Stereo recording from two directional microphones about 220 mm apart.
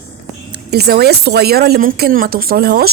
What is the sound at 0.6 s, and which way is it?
A woman's voice, 45° right (ahead or behind).